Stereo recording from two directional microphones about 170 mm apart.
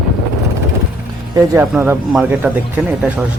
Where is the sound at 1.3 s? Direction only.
15° right (ahead or behind).